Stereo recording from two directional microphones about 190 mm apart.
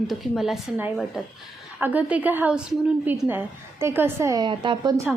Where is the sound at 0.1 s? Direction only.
Centre (ahead or behind); by 4.9 s 25° right (ahead or behind).